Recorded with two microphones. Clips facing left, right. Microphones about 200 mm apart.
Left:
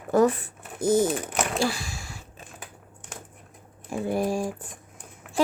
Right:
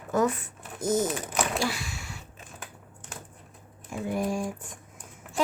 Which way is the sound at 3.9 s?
30° left (ahead or behind).